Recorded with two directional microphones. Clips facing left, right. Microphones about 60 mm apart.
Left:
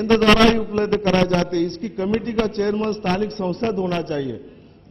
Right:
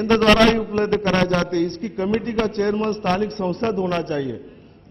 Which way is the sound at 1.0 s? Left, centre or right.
Right.